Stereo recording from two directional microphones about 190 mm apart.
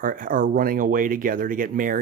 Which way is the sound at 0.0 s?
45° right (ahead or behind).